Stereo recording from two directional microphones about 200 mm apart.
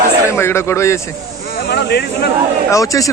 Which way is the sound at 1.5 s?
55° left (ahead or behind).